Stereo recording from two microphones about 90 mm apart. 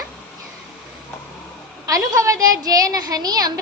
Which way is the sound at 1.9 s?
40° right (ahead or behind).